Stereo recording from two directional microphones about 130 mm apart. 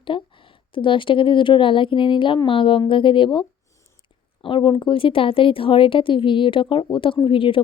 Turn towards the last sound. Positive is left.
turn(degrees=40)  # may be behind; listen again after turning